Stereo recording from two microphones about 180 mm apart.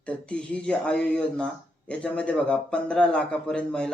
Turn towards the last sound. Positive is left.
turn(degrees=5)  # may be behind; listen again after turning